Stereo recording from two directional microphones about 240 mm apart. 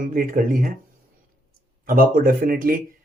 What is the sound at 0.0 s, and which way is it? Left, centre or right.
Speech, right.